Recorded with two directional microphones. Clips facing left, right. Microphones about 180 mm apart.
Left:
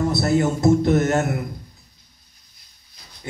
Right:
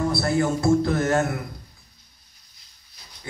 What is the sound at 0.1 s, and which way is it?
A man's voice, 20° left (ahead or behind).